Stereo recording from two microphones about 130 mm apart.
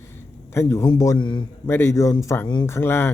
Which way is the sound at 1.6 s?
20° left (ahead or behind).